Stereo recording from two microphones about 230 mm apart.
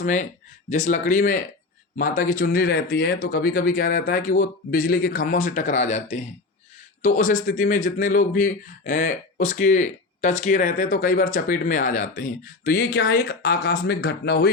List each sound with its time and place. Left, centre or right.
0.0 s speech: left